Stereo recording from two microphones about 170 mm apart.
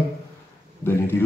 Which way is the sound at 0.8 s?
15° left (ahead or behind).